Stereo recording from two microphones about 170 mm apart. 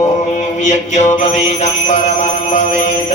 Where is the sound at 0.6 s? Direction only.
45° left (ahead or behind).